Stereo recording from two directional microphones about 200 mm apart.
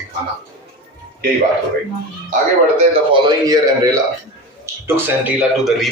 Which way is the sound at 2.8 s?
25° right (ahead or behind).